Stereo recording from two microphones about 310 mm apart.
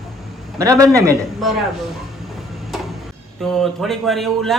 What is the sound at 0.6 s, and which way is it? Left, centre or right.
Speech, centre.